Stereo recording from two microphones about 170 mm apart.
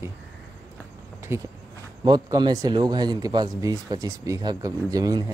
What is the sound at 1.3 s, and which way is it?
Speech, 15° right (ahead or behind).